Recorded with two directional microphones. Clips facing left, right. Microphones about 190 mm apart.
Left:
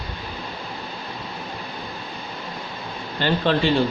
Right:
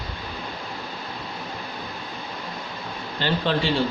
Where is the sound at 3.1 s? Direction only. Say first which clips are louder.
Left 3 dB; 55° left (ahead or behind).